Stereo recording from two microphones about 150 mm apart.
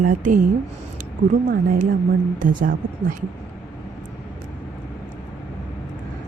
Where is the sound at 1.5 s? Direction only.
65° right (ahead or behind).